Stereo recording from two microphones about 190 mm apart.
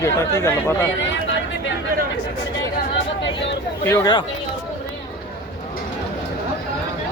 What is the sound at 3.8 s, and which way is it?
Speech, 15° left (ahead or behind).